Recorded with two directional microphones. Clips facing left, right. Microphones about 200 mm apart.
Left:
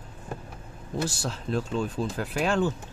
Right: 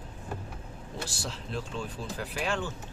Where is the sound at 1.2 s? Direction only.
45° left (ahead or behind).